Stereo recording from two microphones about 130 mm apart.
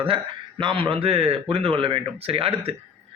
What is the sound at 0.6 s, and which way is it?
Speech, 40° right (ahead or behind).